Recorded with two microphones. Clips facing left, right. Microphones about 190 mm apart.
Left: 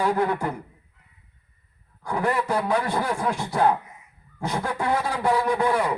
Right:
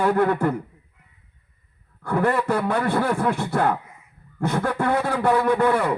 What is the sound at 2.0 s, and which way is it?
A man's voice, 55° right (ahead or behind).